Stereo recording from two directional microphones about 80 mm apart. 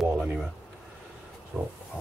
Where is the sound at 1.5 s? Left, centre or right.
Centre.